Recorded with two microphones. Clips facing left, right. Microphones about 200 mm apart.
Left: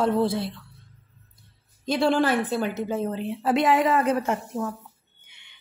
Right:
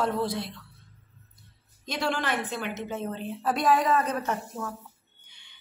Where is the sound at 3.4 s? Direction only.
25° left (ahead or behind).